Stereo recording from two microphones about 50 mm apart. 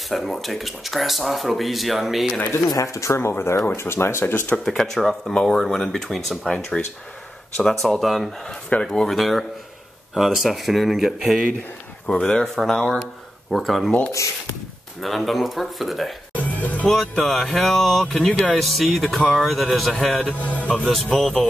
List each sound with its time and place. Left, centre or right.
0.1 s speech: centre
2.5 s speech: left
3.2 s speech: left
4.6 s speech: centre
6.4 s speech: centre
12.1 s speech: centre
12.5 s speech: centre
15.0 s speech: centre
16.3 s music: left
17.2 s speech: centre
18.6 s speech: centre
20.3 s speech: left
20.7 s speech: centre